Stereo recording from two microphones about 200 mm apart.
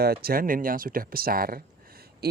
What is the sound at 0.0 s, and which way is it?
Speech, 50° right (ahead or behind).